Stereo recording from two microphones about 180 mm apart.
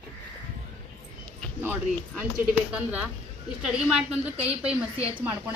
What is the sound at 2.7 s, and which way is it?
A woman's voice, 10° right (ahead or behind).